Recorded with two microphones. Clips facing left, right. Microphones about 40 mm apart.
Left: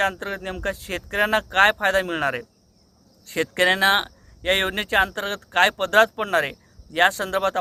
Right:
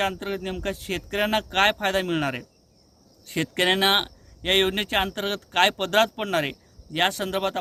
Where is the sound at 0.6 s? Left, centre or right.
Right.